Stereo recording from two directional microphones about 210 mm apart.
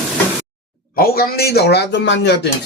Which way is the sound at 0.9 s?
45° left (ahead or behind).